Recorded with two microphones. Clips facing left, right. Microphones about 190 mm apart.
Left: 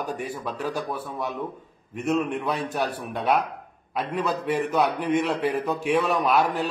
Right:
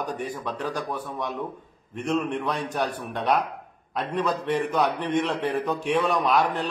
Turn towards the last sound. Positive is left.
turn(degrees=5)  # may be behind; listen again after turning